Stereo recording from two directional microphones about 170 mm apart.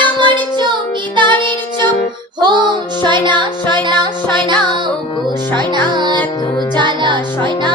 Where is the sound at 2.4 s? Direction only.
25° right (ahead or behind).